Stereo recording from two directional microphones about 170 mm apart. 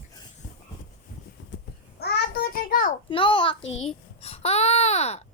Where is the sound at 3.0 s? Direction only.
30° left (ahead or behind).